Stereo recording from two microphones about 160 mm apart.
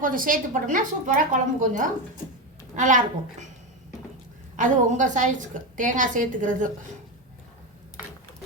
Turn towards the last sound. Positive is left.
turn(degrees=-55)  # may be behind; listen again after turning